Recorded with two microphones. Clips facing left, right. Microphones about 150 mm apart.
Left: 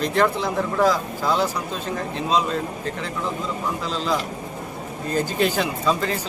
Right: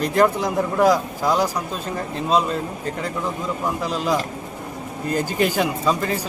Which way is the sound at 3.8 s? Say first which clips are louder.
Right 2 dB; 10° right (ahead or behind).